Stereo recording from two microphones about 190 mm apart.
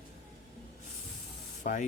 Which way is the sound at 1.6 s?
40° left (ahead or behind).